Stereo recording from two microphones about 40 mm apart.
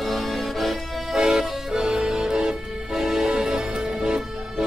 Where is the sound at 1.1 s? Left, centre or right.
Centre.